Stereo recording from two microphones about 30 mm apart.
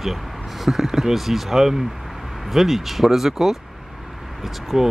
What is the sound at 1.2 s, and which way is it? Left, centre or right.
Speech, centre.